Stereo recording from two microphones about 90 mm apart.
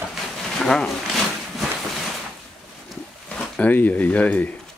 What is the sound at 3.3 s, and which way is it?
Speech, 15° left (ahead or behind).